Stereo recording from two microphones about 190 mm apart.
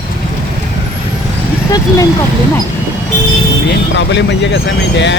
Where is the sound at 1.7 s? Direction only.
15° left (ahead or behind).